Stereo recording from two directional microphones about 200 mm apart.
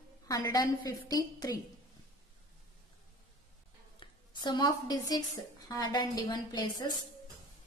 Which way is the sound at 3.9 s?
20° left (ahead or behind).